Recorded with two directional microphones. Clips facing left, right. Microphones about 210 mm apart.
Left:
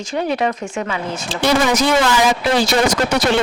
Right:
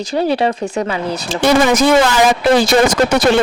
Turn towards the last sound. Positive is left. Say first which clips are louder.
# right 4 dB
turn(degrees=-50)  # may be behind; listen again after turning